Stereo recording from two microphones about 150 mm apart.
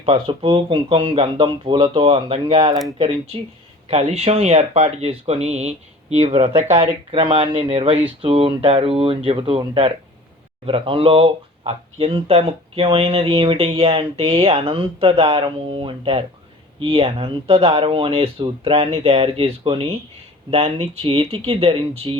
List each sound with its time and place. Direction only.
0.0 s speech: 35° right (ahead or behind)
3.8 s speech: 45° right (ahead or behind)